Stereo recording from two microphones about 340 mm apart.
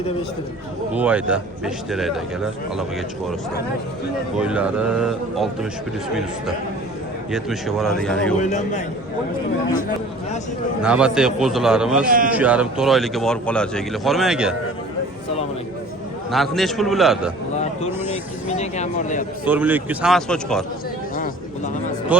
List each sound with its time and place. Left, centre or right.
0.9 s speech: centre
4.4 s speech: centre
7.3 s speech: centre
8.4 s a man's voice: left
10.8 s speech: centre
12.0 s a man's voice: right
12.3 s speech: centre
16.3 s speech: centre
18.4 s speech: centre
19.5 s speech: centre
22.1 s speech: centre